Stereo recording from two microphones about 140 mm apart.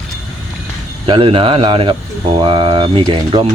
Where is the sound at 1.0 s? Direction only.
40° right (ahead or behind).